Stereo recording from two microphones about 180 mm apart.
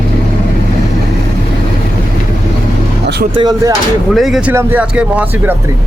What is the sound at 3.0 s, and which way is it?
Vehicle, 70° right (ahead or behind).